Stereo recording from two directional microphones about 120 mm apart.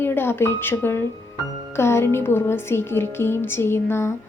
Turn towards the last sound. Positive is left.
turn(degrees=20)  # may be behind; listen again after turning